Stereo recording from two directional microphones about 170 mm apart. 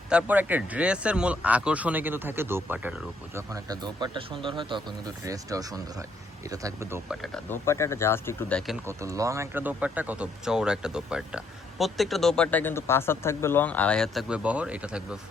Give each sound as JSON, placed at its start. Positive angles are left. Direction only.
{"t": 0.1, "sound": "speech", "side_deg": -10}
{"t": 3.3, "sound": "speech", "side_deg": -20}
{"t": 7.1, "sound": "speech", "side_deg": 0}
{"t": 7.5, "sound": "speech", "side_deg": 15}
{"t": 9.0, "sound": "speech", "side_deg": -20}